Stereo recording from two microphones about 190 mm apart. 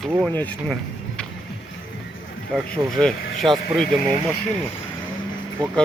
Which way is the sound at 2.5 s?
Centre (ahead or behind).